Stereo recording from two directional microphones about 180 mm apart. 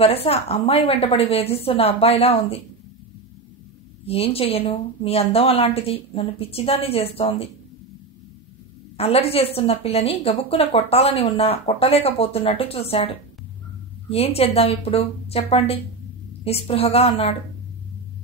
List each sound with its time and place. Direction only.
0.0 s speech: 35° left (ahead or behind)
4.0 s speech: 35° left (ahead or behind)
8.9 s speech: 35° left (ahead or behind)